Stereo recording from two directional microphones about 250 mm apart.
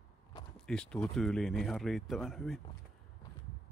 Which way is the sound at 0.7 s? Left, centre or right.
Centre.